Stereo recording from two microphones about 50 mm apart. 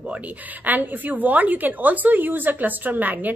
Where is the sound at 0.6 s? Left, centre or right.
Right.